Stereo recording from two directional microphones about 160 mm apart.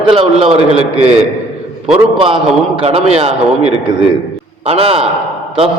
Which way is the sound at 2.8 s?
40° right (ahead or behind).